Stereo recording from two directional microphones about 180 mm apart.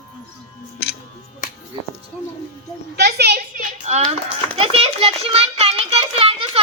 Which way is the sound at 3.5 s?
40° right (ahead or behind).